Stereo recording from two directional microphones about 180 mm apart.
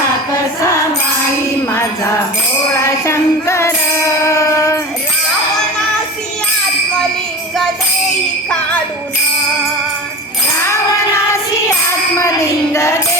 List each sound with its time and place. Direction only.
3.1 s music: 15° left (ahead or behind)
12.7 s music: 15° left (ahead or behind)